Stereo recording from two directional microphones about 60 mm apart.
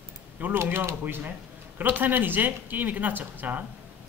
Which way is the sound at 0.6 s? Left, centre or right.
Right.